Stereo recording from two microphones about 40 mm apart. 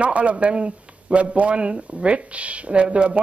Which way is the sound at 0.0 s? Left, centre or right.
Right.